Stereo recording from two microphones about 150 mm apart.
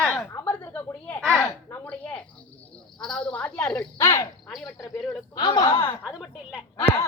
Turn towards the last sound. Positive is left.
turn(degrees=20)  # may be behind; listen again after turning